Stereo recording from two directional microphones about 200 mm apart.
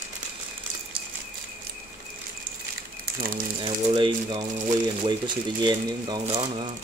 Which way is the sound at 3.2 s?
45° right (ahead or behind).